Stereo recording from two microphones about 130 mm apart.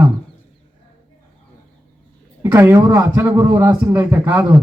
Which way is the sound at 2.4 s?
20° right (ahead or behind).